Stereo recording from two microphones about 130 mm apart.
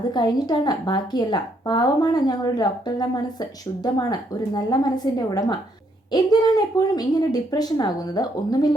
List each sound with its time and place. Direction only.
0.1 s a woman's voice: 35° left (ahead or behind)